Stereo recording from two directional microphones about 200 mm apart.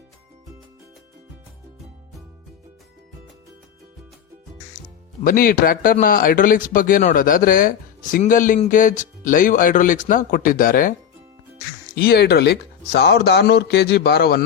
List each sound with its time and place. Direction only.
5.2 s speech: 45° left (ahead or behind)
11.9 s speech: 50° left (ahead or behind)